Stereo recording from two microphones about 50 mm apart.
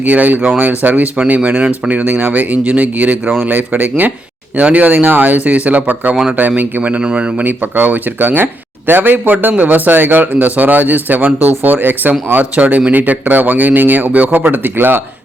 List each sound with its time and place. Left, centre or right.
0.0 s speech: right
7.0 s speech: right
7.4 s speech: right